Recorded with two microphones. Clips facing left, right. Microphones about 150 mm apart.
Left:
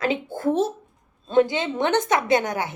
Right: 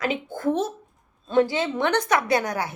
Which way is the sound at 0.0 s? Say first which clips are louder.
Left 2 dB; 30° left (ahead or behind).